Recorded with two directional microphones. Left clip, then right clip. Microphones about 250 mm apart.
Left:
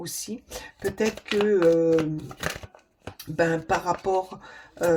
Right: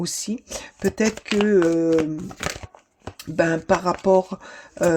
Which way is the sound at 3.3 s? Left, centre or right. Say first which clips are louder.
Right 4 dB; right.